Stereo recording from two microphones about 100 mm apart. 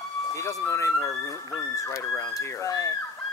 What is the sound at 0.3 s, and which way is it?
Speech, 30° left (ahead or behind).